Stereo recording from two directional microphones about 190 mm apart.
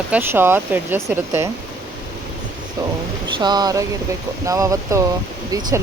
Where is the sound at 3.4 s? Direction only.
20° right (ahead or behind).